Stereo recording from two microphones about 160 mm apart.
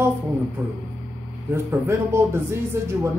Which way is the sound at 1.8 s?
15° right (ahead or behind).